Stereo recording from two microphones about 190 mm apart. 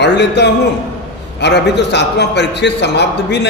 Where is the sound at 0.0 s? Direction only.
65° left (ahead or behind).